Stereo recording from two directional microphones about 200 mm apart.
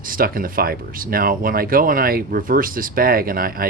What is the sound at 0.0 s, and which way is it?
Speech, 45° right (ahead or behind).